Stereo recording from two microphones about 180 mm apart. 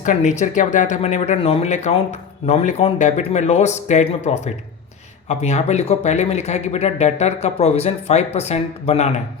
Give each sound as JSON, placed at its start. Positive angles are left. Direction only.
{"t": 0.0, "sound": "speech", "side_deg": 40}